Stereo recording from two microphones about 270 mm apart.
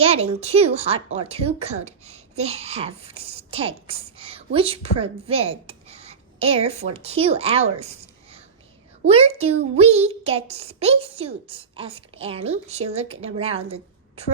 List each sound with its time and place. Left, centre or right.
0.0 s a child's voice: right